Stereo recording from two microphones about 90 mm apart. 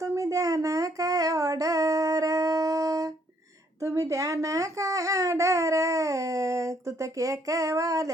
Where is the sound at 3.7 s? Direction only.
35° right (ahead or behind).